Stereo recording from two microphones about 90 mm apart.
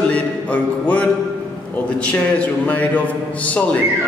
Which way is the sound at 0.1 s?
15° left (ahead or behind).